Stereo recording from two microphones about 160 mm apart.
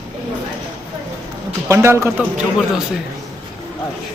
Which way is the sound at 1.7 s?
15° right (ahead or behind).